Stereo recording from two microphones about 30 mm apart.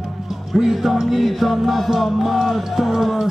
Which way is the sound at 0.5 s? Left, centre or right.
Centre.